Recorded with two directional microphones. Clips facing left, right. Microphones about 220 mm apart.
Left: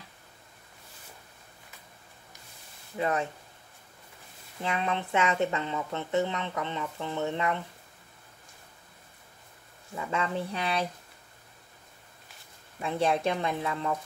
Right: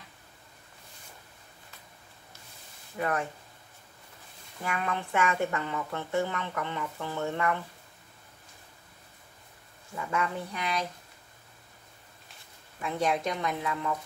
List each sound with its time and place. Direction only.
3.0 s speech: 20° left (ahead or behind)
4.6 s speech: 20° left (ahead or behind)
10.1 s speech: 25° left (ahead or behind)
12.8 s speech: 30° left (ahead or behind)